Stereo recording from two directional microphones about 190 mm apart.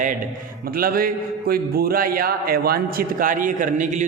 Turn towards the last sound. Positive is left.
turn(degrees=-40)  # may be behind; listen again after turning